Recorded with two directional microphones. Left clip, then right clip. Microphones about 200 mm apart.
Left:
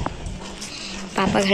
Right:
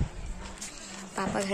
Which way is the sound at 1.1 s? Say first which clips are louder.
Left 11 dB; 5° right (ahead or behind).